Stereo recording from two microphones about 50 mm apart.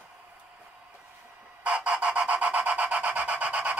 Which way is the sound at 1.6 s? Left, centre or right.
Right.